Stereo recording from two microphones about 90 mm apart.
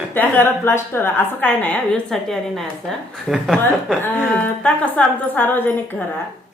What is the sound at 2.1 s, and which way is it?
A woman's voice, 5° left (ahead or behind).